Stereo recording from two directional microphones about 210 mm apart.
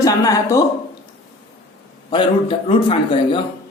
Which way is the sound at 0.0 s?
15° left (ahead or behind).